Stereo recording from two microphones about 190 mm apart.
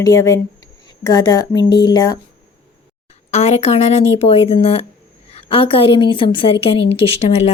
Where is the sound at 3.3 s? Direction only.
35° left (ahead or behind).